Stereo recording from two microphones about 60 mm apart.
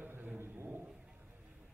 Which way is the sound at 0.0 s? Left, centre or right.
Right.